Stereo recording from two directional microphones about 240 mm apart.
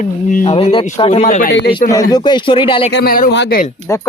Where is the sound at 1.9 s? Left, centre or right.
Centre.